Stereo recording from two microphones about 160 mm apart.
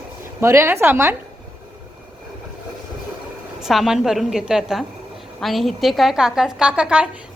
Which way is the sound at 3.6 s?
5° right (ahead or behind).